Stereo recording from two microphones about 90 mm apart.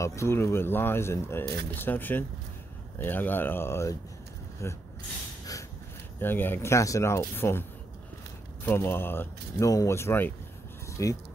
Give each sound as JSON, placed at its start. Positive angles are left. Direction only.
{"t": 0.0, "sound": "speech", "side_deg": 35}
{"t": 6.1, "sound": "speech", "side_deg": 25}
{"t": 8.6, "sound": "speech", "side_deg": 25}
{"t": 9.7, "sound": "speech", "side_deg": 35}
{"t": 10.9, "sound": "a sound", "side_deg": 35}